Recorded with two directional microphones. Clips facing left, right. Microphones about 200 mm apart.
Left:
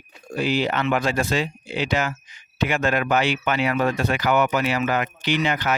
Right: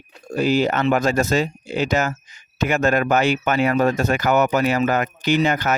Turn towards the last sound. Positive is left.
turn(degrees=-45)  # may be behind; listen again after turning